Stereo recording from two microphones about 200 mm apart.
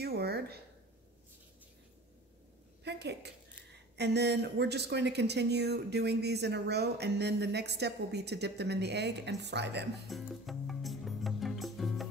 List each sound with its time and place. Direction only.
0.0 s a sound: 50° right (ahead or behind)
2.8 s a woman's voice: 55° right (ahead or behind)
10.0 s music: centre (ahead or behind)